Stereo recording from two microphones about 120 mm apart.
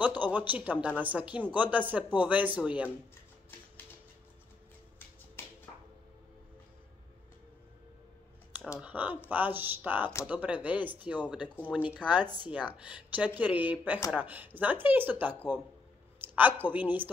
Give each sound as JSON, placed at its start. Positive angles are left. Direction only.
{"t": 0.2, "sound": "speech", "side_deg": -15}
{"t": 5.4, "sound": "a sound", "side_deg": 20}
{"t": 8.8, "sound": "a woman's voice", "side_deg": -15}